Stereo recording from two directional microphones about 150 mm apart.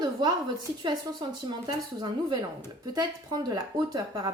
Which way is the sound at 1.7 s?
30° right (ahead or behind).